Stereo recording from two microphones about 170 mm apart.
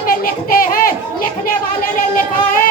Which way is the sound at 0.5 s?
55° left (ahead or behind).